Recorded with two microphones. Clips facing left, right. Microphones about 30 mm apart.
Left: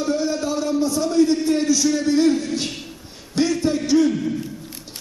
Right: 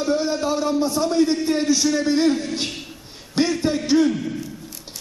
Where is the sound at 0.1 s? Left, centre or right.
Right.